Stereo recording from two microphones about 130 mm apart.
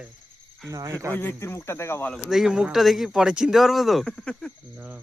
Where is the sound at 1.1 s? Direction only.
15° left (ahead or behind).